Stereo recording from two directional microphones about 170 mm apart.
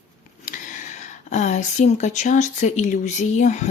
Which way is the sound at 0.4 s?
50° left (ahead or behind).